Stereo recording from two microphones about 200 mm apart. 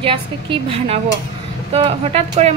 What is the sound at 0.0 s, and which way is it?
A woman's voice, 25° right (ahead or behind).